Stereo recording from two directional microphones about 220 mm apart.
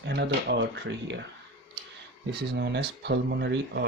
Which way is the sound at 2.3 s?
50° right (ahead or behind).